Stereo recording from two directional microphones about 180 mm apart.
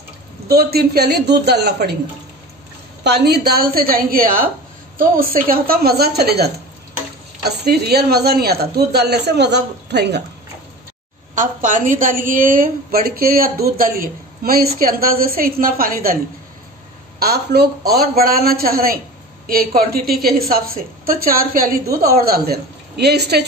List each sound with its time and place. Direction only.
0.5 s speech: 60° right (ahead or behind)
3.0 s speech: 65° right (ahead or behind)
11.3 s a woman's voice: 45° right (ahead or behind)
17.2 s speech: 65° right (ahead or behind)